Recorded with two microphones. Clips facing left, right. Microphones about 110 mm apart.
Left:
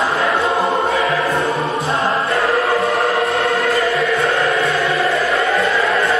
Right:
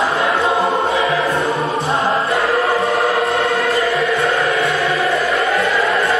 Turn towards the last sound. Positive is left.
turn(degrees=0)  # may be behind; listen again after turning